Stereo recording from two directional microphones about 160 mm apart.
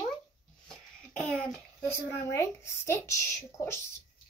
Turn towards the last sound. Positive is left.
turn(degrees=15)  # may be behind; listen again after turning